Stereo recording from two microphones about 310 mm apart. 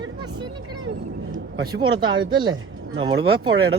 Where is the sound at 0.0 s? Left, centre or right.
Centre.